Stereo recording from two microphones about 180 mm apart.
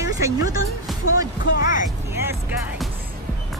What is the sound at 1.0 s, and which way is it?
Music, 90° left.